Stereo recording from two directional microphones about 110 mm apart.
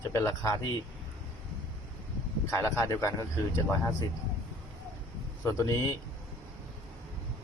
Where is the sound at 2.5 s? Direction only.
25° left (ahead or behind).